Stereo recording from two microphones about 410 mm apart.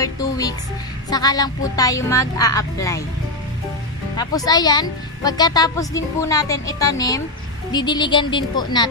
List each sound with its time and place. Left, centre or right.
0.0 s speech: centre
4.2 s speech: centre